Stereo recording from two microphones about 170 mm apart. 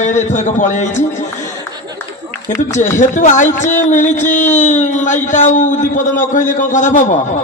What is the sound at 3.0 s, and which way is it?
A man's voice, 45° left (ahead or behind).